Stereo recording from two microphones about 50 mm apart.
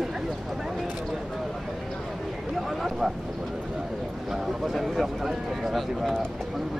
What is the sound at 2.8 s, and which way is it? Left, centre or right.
Speech, centre.